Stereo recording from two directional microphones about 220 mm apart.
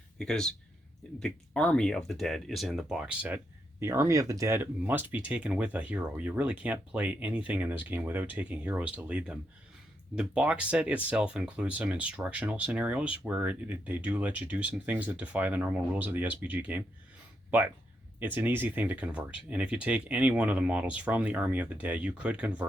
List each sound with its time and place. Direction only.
0.2 s speech: 5° left (ahead or behind)
18.2 s speech: 10° right (ahead or behind)